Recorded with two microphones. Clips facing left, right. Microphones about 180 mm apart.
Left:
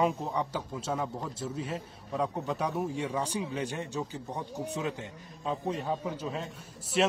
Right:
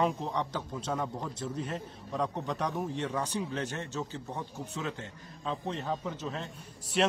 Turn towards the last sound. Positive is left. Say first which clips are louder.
# left 1 dB
turn(degrees=0)  # may be behind; listen again after turning